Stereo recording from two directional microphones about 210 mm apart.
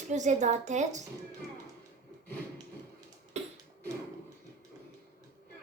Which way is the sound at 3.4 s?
30° right (ahead or behind).